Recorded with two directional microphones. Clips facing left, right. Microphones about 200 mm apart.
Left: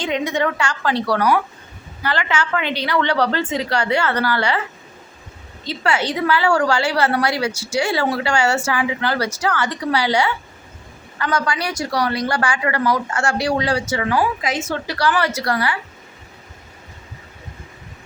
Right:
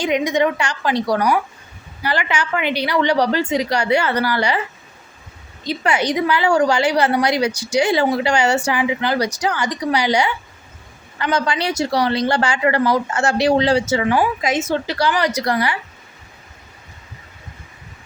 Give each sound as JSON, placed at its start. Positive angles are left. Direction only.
{"t": 0.0, "sound": "a woman's voice", "side_deg": -15}
{"t": 5.6, "sound": "a woman's voice", "side_deg": -15}